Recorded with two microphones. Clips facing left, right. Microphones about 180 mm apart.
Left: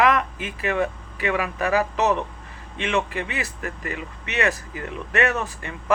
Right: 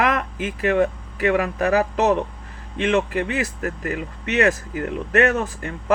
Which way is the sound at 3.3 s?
45° right (ahead or behind).